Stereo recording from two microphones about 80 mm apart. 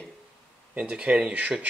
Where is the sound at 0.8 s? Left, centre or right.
Centre.